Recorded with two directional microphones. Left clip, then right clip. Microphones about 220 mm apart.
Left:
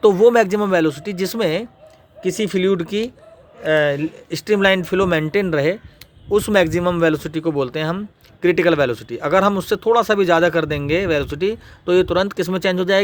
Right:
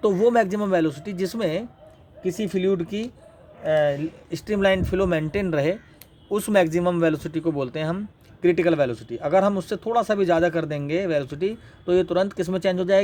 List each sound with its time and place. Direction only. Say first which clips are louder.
0.0 s speech: left 7 dB; 25° left (ahead or behind)